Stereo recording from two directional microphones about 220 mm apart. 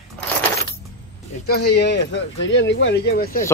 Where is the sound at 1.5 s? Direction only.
45° left (ahead or behind).